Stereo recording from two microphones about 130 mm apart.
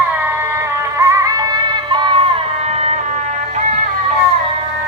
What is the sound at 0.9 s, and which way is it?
Music, 25° right (ahead or behind).